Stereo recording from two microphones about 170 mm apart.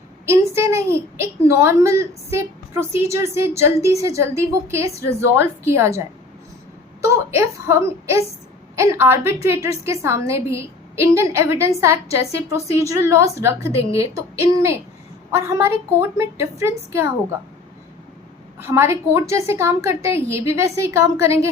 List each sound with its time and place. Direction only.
0.3 s a sound: 15° right (ahead or behind)
1.2 s a woman's voice: 15° right (ahead or behind)
7.3 s a woman's voice: 15° right (ahead or behind)
15.3 s a woman's voice: 15° right (ahead or behind)
18.6 s a woman's voice: 15° right (ahead or behind)